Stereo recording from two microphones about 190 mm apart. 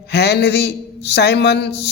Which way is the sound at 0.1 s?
60° left (ahead or behind).